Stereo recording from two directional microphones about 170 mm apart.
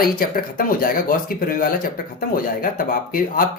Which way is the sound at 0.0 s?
60° left (ahead or behind).